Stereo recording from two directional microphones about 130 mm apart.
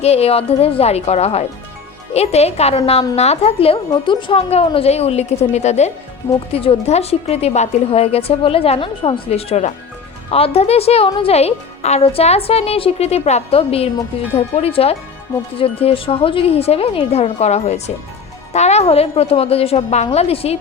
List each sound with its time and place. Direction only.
0.0 s speech: 50° left (ahead or behind)
6.5 s speech: 50° left (ahead or behind)